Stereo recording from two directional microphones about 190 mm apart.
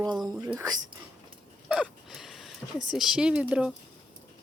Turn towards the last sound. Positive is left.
turn(degrees=-5)  # may be behind; listen again after turning